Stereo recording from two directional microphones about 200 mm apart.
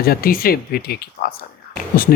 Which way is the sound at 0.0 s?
50° left (ahead or behind).